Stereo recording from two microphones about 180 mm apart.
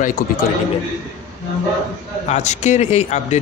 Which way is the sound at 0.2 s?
50° left (ahead or behind).